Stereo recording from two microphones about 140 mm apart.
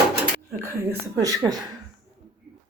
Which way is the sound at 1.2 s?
25° right (ahead or behind).